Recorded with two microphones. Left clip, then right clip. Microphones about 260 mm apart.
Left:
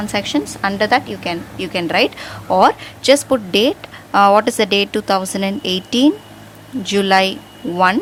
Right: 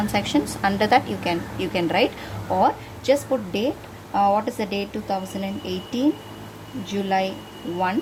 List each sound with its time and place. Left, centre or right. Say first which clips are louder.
0.1 s a woman's voice: left 3 dB; centre